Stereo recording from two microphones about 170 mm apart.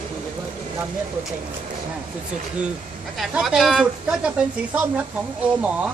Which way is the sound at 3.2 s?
Centre (ahead or behind).